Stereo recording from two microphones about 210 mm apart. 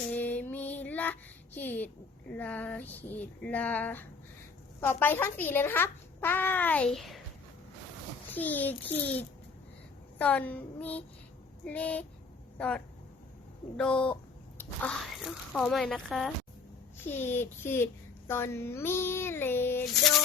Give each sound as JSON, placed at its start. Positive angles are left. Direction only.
{"t": 0.1, "sound": "child singing", "side_deg": 10}
{"t": 2.3, "sound": "a child's voice", "side_deg": 5}
{"t": 8.3, "sound": "a child's voice", "side_deg": 10}
{"t": 10.2, "sound": "a child's voice", "side_deg": 5}